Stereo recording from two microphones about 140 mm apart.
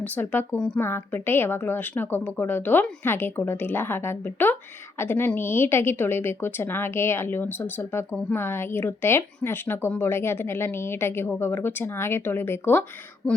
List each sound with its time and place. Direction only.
0.0 s a woman's voice: 10° left (ahead or behind)
0.8 s a woman's voice: 15° left (ahead or behind)